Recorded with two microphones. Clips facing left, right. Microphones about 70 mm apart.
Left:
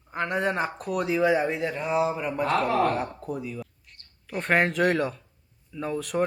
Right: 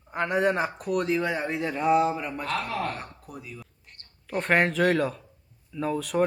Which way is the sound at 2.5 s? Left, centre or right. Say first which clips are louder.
Left 7 dB; left.